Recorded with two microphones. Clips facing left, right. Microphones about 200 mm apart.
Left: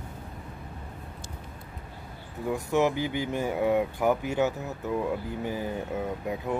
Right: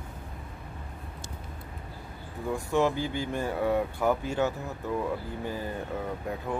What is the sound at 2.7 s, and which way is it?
Speech, 15° left (ahead or behind).